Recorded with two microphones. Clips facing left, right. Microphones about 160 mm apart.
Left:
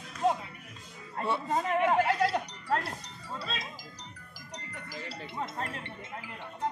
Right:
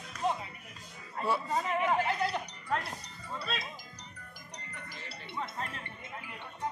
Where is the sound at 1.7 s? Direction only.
90° left.